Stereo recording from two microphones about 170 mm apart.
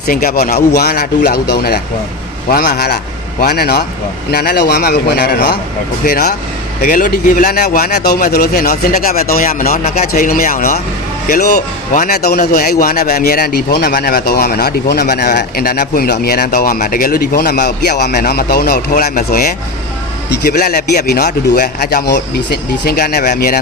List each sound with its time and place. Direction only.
0.1 s a man's voice: 60° left (ahead or behind)
6.1 s a man's voice: 60° left (ahead or behind)
11.3 s a man's voice: 70° left (ahead or behind)
22.1 s a man's voice: 75° left (ahead or behind); by 23.6 s 60° left (ahead or behind)